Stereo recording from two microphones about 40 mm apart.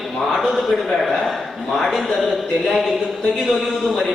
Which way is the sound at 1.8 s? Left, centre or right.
Centre.